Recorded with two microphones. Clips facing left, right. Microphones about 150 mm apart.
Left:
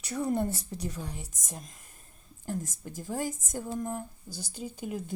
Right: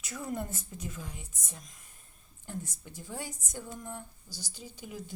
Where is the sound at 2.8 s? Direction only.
45° left (ahead or behind).